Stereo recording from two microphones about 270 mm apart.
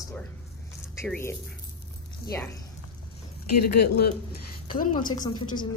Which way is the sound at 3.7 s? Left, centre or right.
Left.